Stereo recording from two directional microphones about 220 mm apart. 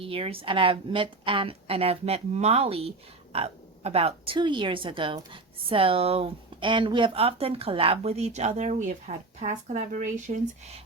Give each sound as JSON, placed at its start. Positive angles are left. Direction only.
{"t": 0.0, "sound": "a woman's voice", "side_deg": -25}